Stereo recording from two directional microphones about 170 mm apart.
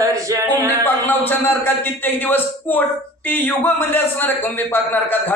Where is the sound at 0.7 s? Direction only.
10° left (ahead or behind).